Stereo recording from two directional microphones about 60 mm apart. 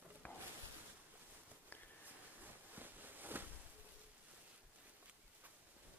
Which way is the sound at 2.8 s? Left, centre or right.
Right.